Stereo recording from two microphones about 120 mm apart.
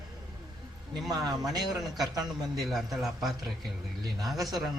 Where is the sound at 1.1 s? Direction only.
30° right (ahead or behind).